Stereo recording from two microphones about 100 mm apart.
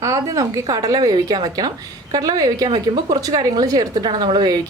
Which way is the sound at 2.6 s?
50° right (ahead or behind).